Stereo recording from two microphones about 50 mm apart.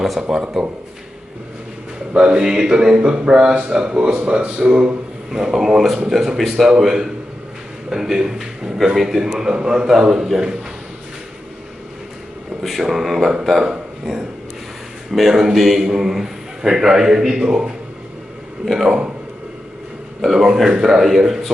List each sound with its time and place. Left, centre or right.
0.0 s speech: centre
2.1 s a man's voice: centre
5.3 s a man's voice: centre
12.6 s speech: centre
13.7 s a sound: centre
15.1 s a man's voice: centre
18.9 s speech: centre
20.2 s a man's voice: centre